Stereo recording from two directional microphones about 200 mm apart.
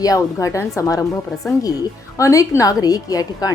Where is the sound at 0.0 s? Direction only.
15° left (ahead or behind).